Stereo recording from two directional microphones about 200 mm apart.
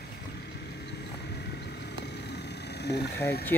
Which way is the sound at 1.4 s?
55° left (ahead or behind).